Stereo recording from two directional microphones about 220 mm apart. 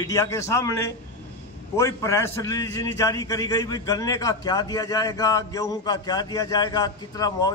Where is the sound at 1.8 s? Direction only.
15° left (ahead or behind).